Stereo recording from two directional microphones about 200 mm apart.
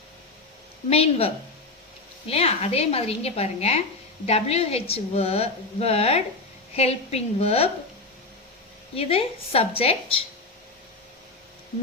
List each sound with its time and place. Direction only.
0.9 s a woman's voice: 30° left (ahead or behind)
9.0 s a woman's voice: 30° left (ahead or behind)